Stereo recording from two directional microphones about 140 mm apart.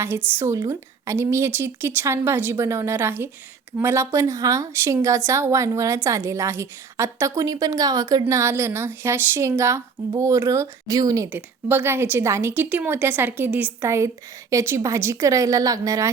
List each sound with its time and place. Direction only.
0.3 s a woman's voice: 20° right (ahead or behind)
11.3 s a woman's voice: 15° right (ahead or behind)